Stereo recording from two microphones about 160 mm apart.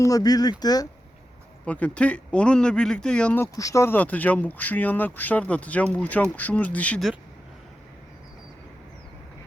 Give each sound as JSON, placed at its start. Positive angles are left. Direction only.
{"t": 0.0, "sound": "speech", "side_deg": 25}
{"t": 1.6, "sound": "speech", "side_deg": 10}